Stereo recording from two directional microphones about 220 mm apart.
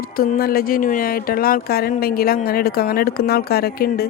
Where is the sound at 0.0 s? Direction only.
40° left (ahead or behind).